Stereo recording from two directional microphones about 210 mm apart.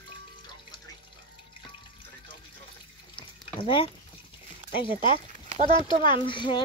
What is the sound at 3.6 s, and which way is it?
Speech, 25° left (ahead or behind).